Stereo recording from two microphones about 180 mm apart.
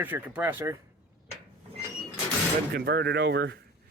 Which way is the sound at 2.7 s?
65° right (ahead or behind).